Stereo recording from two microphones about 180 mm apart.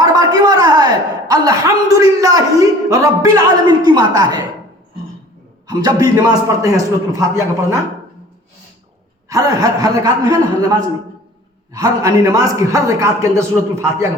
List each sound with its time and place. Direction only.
0.0 s a man's voice: 20° right (ahead or behind)
5.6 s a man's voice: 20° right (ahead or behind)
9.3 s a man's voice: 20° right (ahead or behind)